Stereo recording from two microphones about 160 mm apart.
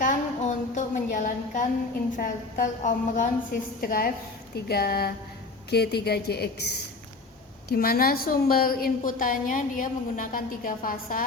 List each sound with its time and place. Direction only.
0.0 s a sound: 50° left (ahead or behind)
2.1 s a woman's voice: 55° left (ahead or behind)
3.8 s a woman's voice: 65° left (ahead or behind)
4.5 s a sound: 80° left
5.7 s a woman's voice: 90° left
7.7 s a woman's voice: 70° left (ahead or behind)